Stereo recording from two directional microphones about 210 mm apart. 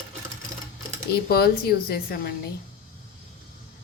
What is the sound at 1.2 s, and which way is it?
A woman's voice, 45° left (ahead or behind).